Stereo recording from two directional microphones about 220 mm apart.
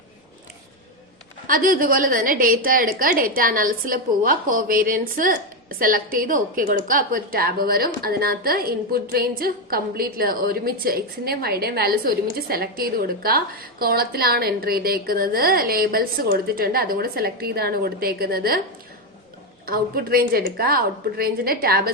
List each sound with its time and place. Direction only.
1.5 s a woman's voice: 40° right (ahead or behind)
19.6 s a woman's voice: 40° right (ahead or behind)